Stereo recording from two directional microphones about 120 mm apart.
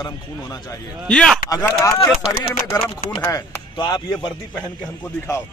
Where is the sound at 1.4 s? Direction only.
30° left (ahead or behind).